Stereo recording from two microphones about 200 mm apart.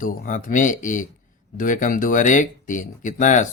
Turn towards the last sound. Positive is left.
turn(degrees=40)  # may be behind; listen again after turning